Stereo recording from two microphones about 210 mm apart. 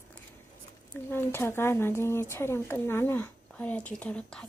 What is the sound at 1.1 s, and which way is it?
A woman's voice, 10° left (ahead or behind).